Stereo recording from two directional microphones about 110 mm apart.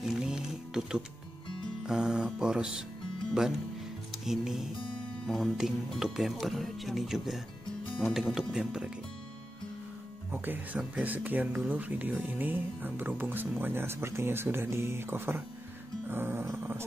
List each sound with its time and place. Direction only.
0.0 s music: 5° right (ahead or behind)
1.9 s speech: 5° right (ahead or behind)
4.2 s speech: 5° right (ahead or behind)
10.3 s speech: 15° right (ahead or behind)